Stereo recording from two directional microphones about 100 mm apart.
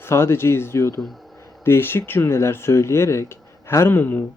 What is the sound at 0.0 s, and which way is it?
Speech, 25° left (ahead or behind).